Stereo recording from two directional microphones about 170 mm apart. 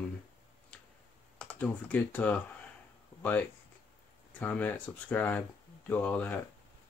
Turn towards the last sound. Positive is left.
turn(degrees=10)  # may be behind; listen again after turning